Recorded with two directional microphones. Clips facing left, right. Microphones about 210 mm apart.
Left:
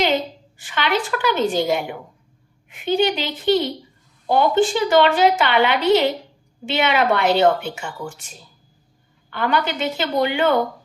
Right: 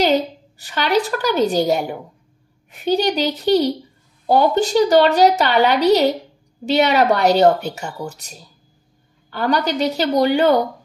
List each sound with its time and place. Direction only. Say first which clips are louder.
0.0 s a woman's voice: right 4 dB; 40° right (ahead or behind)